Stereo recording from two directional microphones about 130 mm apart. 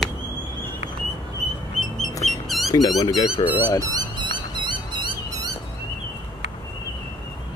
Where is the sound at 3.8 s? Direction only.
35° right (ahead or behind).